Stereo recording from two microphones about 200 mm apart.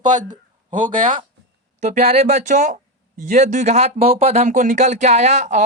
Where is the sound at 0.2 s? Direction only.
40° right (ahead or behind).